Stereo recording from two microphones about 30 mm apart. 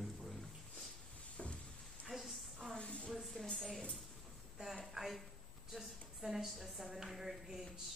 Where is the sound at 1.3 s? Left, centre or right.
Left.